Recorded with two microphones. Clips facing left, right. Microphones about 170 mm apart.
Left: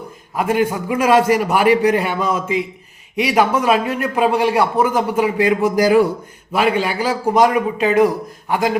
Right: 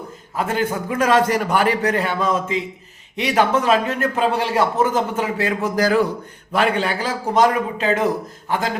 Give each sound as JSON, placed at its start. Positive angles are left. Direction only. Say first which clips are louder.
{"t": 0.3, "sound": "a man's voice", "louder": "left 4 dB", "side_deg": 15}